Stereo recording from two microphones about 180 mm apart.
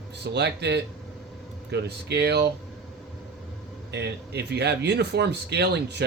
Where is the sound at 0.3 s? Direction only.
70° right (ahead or behind).